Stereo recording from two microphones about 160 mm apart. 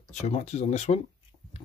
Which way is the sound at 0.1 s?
45° left (ahead or behind).